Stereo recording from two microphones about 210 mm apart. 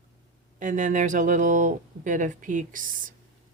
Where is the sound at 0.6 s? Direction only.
35° right (ahead or behind).